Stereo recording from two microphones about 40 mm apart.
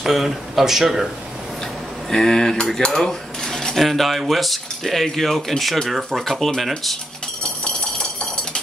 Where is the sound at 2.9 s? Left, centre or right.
Centre.